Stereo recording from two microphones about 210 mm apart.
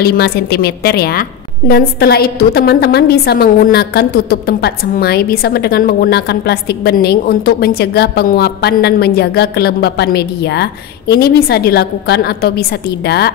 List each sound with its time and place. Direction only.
0.0 s a woman's voice: 50° left (ahead or behind)